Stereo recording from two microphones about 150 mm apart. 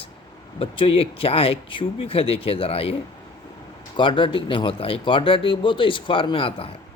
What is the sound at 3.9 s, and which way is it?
Speech, 35° left (ahead or behind).